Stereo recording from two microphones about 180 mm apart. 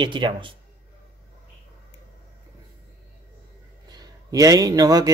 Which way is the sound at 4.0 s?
20° right (ahead or behind).